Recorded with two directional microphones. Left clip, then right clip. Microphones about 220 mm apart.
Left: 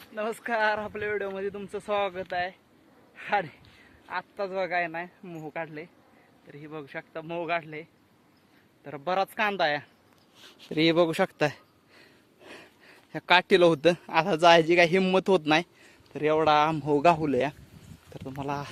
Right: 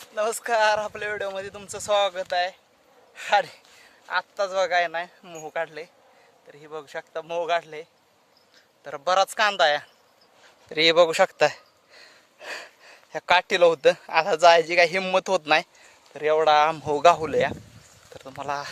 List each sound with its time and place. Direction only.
0.1 s speech: 10° right (ahead or behind)
6.5 s a man's voice: centre (ahead or behind)
12.4 s a sound: 15° right (ahead or behind)
12.8 s a man's voice: centre (ahead or behind)